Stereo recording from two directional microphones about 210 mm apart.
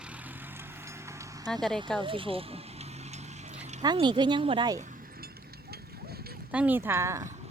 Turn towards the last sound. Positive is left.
turn(degrees=-15)  # may be behind; listen again after turning